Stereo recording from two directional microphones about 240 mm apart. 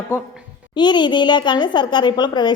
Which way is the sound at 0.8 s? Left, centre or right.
Centre.